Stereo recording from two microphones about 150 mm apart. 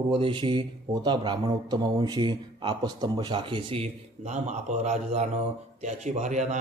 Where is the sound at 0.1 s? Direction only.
35° right (ahead or behind).